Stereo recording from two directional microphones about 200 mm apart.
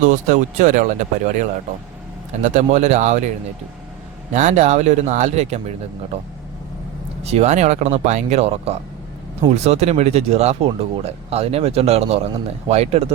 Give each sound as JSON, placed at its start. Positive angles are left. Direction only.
{"t": 0.6, "sound": "speech", "side_deg": -40}
{"t": 4.4, "sound": "speech", "side_deg": -35}
{"t": 7.2, "sound": "speech", "side_deg": -30}